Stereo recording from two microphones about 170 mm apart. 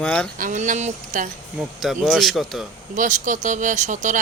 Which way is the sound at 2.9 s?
50° right (ahead or behind).